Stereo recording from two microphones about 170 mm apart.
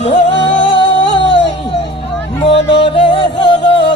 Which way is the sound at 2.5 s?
35° left (ahead or behind).